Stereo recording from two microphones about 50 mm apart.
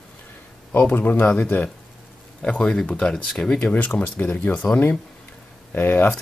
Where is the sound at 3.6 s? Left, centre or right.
Left.